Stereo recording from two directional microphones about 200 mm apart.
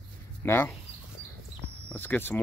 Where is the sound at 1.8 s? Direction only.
10° left (ahead or behind).